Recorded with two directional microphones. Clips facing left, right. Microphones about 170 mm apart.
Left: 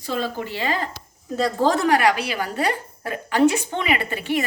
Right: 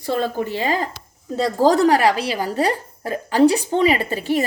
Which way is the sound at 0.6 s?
40° right (ahead or behind).